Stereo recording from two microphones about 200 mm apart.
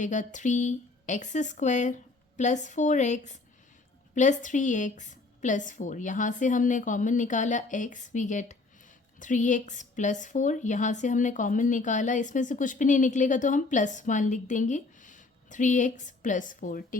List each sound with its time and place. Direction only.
0.0 s a woman's voice: 40° left (ahead or behind)